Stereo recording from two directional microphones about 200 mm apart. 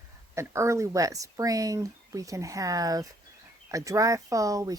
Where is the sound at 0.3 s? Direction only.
15° right (ahead or behind).